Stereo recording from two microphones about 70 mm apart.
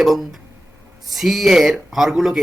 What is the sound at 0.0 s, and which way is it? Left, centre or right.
A man's voice, centre.